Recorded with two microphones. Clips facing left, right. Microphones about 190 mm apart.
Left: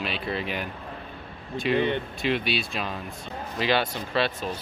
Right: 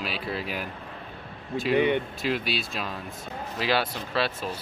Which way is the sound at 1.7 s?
15° right (ahead or behind).